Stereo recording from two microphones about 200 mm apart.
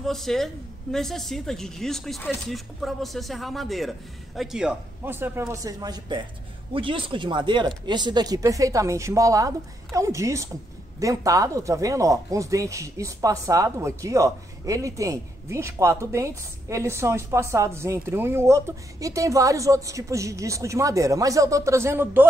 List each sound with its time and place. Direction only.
0.0 s speech: centre (ahead or behind)